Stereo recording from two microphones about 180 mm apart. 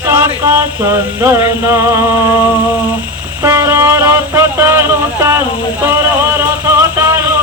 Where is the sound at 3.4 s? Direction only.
15° right (ahead or behind).